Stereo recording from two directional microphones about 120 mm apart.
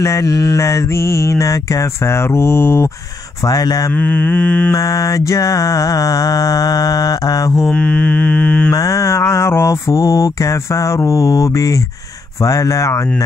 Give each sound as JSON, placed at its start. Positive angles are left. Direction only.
{"t": 0.0, "sound": "mantra", "side_deg": 25}
{"t": 3.4, "sound": "speech", "side_deg": 30}
{"t": 3.9, "sound": "mantra", "side_deg": 15}
{"t": 4.7, "sound": "mantra", "side_deg": 30}
{"t": 7.6, "sound": "mantra", "side_deg": 10}
{"t": 8.7, "sound": "mantra", "side_deg": 25}